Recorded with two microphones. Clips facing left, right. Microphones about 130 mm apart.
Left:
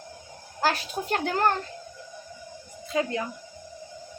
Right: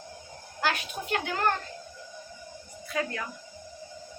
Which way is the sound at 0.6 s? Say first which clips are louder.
Left 4 dB; 35° left (ahead or behind).